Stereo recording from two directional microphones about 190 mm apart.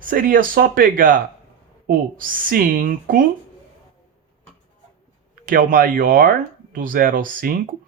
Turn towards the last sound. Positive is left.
turn(degrees=-45)  # may be behind; listen again after turning